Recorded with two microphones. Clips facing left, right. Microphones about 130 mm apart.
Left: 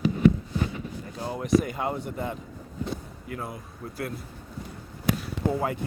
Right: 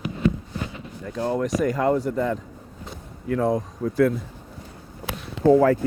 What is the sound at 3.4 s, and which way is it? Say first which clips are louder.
Speech: right 14 dB; 90° right.